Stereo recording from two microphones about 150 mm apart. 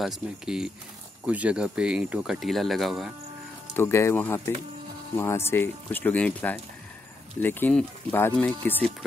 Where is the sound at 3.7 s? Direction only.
15° left (ahead or behind).